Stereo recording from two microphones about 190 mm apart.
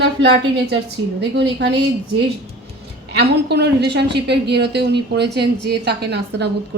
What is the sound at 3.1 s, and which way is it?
A woman's voice, 60° right (ahead or behind).